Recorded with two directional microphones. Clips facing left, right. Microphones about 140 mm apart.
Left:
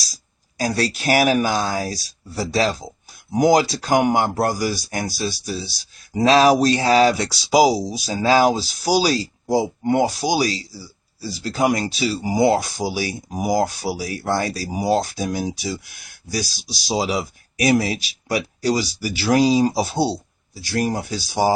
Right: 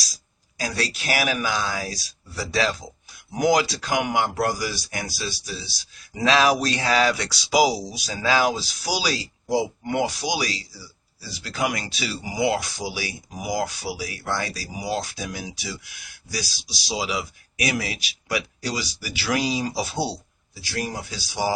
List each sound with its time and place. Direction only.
0.6 s speech: 40° left (ahead or behind)